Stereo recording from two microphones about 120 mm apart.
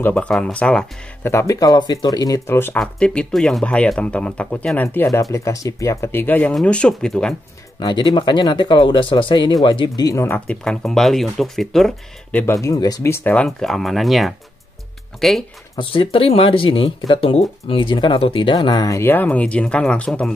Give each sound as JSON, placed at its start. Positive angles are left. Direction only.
{"t": 0.0, "sound": "speech", "side_deg": 10}
{"t": 1.2, "sound": "speech", "side_deg": 25}
{"t": 2.8, "sound": "speech", "side_deg": 5}
{"t": 4.8, "sound": "speech", "side_deg": 25}
{"t": 7.8, "sound": "speech", "side_deg": 40}
{"t": 10.4, "sound": "speech", "side_deg": 10}
{"t": 12.6, "sound": "speech", "side_deg": 30}
{"t": 15.7, "sound": "speech", "side_deg": 50}